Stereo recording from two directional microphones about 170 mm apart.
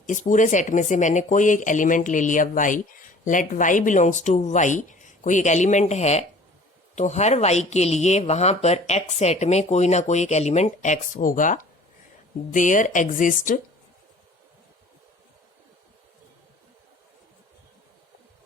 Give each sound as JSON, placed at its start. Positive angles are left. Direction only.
{"t": 0.0, "sound": "speech", "side_deg": 45}